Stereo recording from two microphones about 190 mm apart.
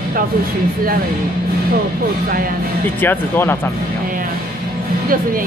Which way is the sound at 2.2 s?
50° right (ahead or behind).